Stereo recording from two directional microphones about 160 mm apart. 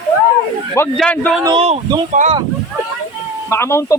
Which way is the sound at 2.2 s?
55° right (ahead or behind).